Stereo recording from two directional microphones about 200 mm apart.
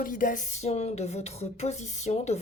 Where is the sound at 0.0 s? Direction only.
40° left (ahead or behind).